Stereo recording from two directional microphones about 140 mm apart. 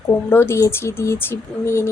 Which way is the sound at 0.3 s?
15° left (ahead or behind).